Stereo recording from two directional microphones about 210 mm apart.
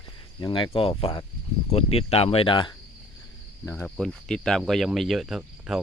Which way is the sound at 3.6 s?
10° left (ahead or behind).